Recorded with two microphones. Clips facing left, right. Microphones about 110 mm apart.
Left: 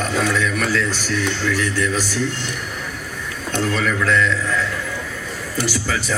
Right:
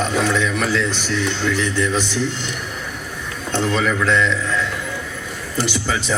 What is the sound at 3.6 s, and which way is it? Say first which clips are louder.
Speech: right 1 dB; 20° right (ahead or behind).